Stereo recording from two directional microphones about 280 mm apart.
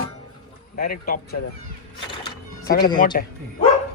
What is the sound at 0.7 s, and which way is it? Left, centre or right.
Speech, left.